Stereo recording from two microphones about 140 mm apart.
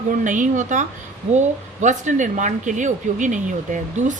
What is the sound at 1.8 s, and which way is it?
Speech, 60° right (ahead or behind).